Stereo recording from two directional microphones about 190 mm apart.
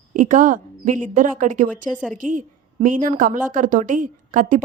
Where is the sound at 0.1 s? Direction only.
40° right (ahead or behind).